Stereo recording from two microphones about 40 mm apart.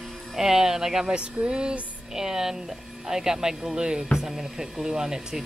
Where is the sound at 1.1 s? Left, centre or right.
Right.